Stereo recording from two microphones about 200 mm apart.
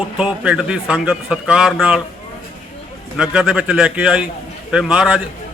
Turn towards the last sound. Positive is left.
turn(degrees=-5)  # may be behind; listen again after turning